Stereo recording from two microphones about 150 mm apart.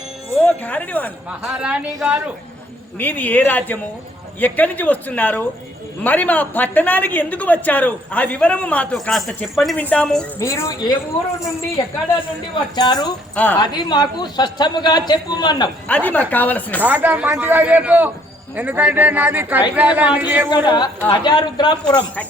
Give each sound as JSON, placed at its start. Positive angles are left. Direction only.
{"t": 0.4, "sound": "speech", "side_deg": 10}
{"t": 1.5, "sound": "a man's voice", "side_deg": -5}
{"t": 3.0, "sound": "a woman's voice", "side_deg": 10}
{"t": 10.4, "sound": "a man's voice", "side_deg": 20}
{"t": 13.3, "sound": "a woman's voice", "side_deg": 10}
{"t": 13.6, "sound": "a man's voice", "side_deg": 30}
{"t": 15.9, "sound": "a woman's voice", "side_deg": 10}
{"t": 16.8, "sound": "a man's voice", "side_deg": -10}
{"t": 20.7, "sound": "a man's voice", "side_deg": 30}